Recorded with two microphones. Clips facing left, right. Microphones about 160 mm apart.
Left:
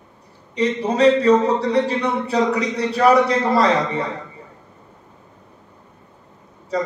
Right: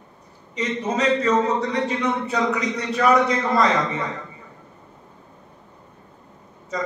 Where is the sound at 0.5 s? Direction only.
35° left (ahead or behind).